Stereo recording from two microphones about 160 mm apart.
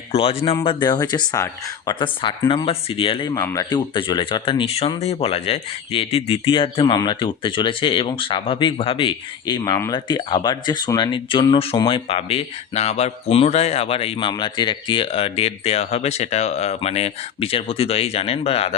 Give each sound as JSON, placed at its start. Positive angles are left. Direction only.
{"t": 0.1, "sound": "speech", "side_deg": 35}